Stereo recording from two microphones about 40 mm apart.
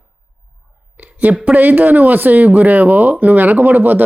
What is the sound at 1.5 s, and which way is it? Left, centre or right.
Speech, right.